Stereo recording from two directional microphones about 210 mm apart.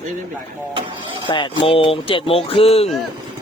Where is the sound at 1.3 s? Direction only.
25° left (ahead or behind).